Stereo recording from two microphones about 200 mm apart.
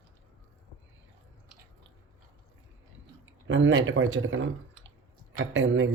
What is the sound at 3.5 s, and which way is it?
Speech, 70° right (ahead or behind).